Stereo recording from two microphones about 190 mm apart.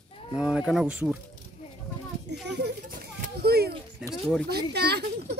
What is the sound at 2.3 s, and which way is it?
A child's voice, 65° right (ahead or behind).